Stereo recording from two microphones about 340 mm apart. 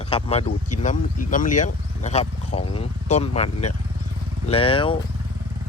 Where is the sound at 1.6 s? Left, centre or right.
Centre.